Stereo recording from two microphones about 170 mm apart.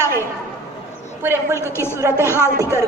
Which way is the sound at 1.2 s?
15° right (ahead or behind).